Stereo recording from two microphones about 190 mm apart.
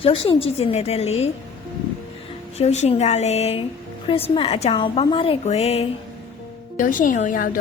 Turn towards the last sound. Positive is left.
turn(degrees=45)  # may be behind; listen again after turning